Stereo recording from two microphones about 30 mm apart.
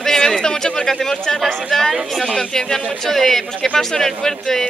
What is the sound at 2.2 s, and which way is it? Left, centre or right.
Speech, left.